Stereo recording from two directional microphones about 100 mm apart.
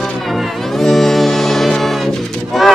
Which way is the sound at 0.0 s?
Centre (ahead or behind).